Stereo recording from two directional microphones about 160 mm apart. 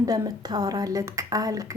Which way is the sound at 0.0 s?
20° right (ahead or behind).